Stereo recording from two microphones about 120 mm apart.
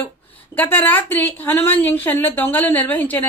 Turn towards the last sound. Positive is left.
turn(degrees=15)  # may be behind; listen again after turning